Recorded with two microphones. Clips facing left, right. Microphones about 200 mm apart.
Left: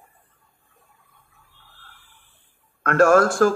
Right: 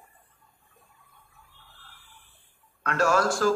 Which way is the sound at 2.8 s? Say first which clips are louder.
Left 8 dB; 55° left (ahead or behind).